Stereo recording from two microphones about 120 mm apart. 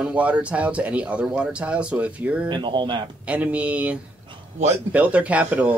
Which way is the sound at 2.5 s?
40° right (ahead or behind).